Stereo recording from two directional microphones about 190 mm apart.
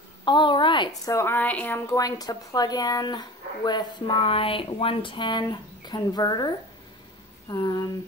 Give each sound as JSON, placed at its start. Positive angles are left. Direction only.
{"t": 0.2, "sound": "a woman's voice", "side_deg": 25}
{"t": 1.0, "sound": "a woman's voice", "side_deg": 15}